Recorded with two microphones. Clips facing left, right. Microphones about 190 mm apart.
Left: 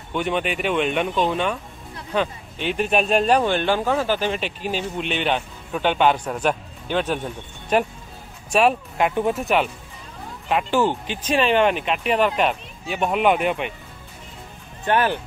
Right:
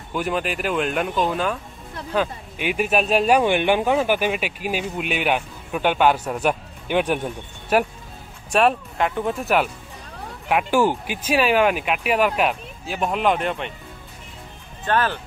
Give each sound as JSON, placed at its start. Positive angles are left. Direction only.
{"t": 0.1, "sound": "speech", "side_deg": 0}
{"t": 8.5, "sound": "speech", "side_deg": 0}
{"t": 8.9, "sound": "speech", "side_deg": 15}
{"t": 9.3, "sound": "speech", "side_deg": 0}
{"t": 14.9, "sound": "speech", "side_deg": 15}